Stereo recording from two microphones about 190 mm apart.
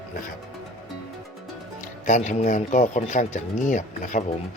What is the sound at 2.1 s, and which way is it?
Speech, 40° left (ahead or behind).